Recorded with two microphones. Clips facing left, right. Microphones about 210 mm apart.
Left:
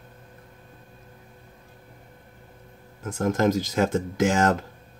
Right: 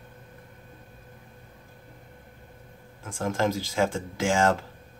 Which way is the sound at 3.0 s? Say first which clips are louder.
Left 4 dB; 45° left (ahead or behind).